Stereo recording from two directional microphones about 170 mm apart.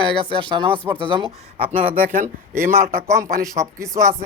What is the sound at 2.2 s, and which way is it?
Speech, 15° right (ahead or behind).